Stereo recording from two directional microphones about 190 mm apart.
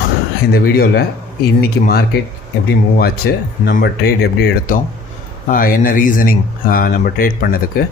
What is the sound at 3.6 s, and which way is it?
Speech, 55° left (ahead or behind).